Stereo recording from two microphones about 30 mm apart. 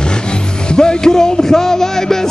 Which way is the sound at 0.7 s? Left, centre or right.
Left.